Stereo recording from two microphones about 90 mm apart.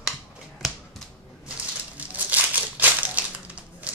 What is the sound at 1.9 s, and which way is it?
Crumpling, 20° right (ahead or behind).